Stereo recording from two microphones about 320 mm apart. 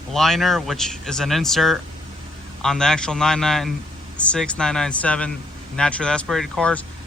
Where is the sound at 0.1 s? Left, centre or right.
Centre.